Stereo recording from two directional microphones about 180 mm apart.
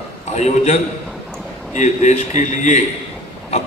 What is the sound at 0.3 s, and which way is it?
A man's voice, 40° left (ahead or behind).